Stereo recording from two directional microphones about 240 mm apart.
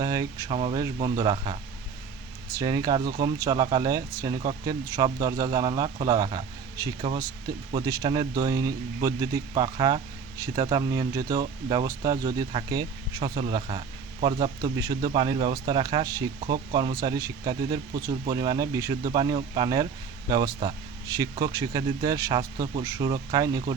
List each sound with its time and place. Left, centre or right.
0.0 s speech: centre
2.6 s speech: centre